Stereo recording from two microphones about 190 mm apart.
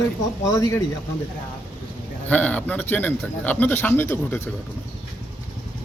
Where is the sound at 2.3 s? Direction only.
10° left (ahead or behind).